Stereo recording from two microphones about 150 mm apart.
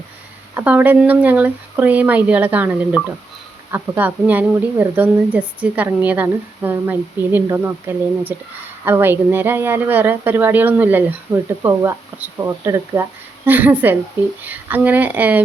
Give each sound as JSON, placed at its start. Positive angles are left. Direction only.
{"t": 0.5, "sound": "speech", "side_deg": -10}
{"t": 11.3, "sound": "speech", "side_deg": -25}